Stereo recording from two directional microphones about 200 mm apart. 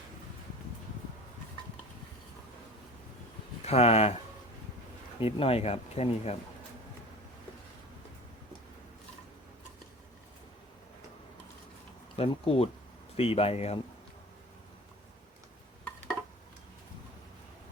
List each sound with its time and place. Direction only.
3.6 s speech: 30° left (ahead or behind)
5.2 s speech: 30° left (ahead or behind)
12.1 s speech: 30° left (ahead or behind)